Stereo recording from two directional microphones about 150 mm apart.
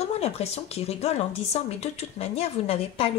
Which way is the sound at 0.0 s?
45° left (ahead or behind).